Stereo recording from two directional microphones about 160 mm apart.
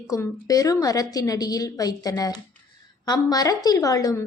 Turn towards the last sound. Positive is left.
turn(degrees=20)  # may be behind; listen again after turning